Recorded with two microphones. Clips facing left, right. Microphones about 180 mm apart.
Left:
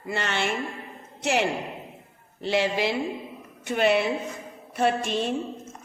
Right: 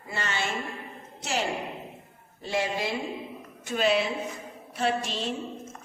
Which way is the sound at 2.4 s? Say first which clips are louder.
Left 5 dB; 80° left.